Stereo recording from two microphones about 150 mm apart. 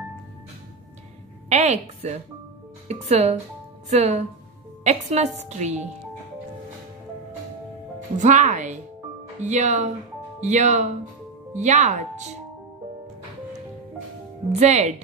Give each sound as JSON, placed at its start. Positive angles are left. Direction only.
{"t": 1.5, "sound": "a woman's voice", "side_deg": -50}
{"t": 8.2, "sound": "a woman's voice", "side_deg": -55}
{"t": 14.5, "sound": "a woman's voice", "side_deg": -50}